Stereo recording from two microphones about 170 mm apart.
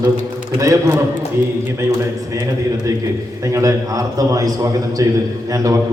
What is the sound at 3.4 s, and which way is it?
A man's voice, 20° right (ahead or behind).